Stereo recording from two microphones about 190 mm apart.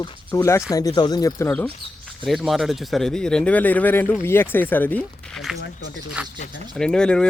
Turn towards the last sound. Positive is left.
turn(degrees=5)  # may be behind; listen again after turning